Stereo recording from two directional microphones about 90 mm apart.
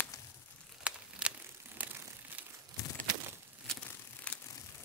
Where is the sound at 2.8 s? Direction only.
35° left (ahead or behind).